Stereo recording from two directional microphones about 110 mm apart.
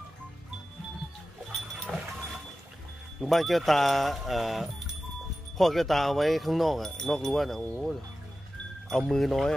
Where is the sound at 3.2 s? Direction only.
Centre (ahead or behind).